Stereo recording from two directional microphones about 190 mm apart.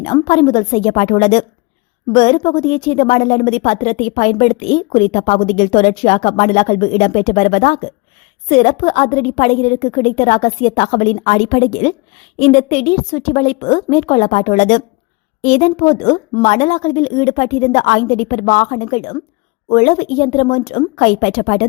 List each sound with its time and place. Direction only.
0.0 s a woman's voice: 30° left (ahead or behind)